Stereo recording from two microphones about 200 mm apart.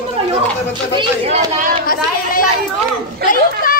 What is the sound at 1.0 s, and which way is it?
Speech, 30° right (ahead or behind).